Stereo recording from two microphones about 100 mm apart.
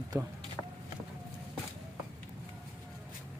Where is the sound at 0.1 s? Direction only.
25° right (ahead or behind).